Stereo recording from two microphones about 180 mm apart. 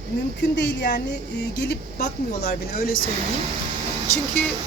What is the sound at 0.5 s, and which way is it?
Speech, 70° left (ahead or behind).